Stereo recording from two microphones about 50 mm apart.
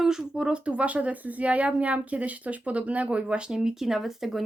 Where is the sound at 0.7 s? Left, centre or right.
Right.